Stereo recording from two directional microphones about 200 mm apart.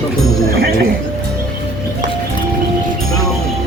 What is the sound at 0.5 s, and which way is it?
Music, 50° right (ahead or behind).